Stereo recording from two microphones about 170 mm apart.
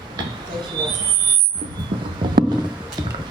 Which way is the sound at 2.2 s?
25° right (ahead or behind).